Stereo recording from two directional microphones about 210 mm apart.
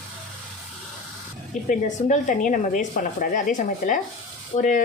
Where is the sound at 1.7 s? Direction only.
40° left (ahead or behind).